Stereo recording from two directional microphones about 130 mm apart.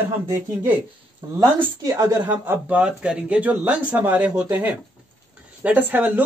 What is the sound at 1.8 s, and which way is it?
Speech, 25° right (ahead or behind).